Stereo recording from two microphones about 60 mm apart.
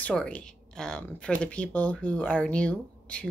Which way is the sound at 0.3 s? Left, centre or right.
Centre.